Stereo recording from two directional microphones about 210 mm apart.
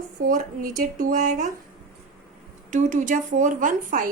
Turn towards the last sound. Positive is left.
turn(degrees=-40)  # may be behind; listen again after turning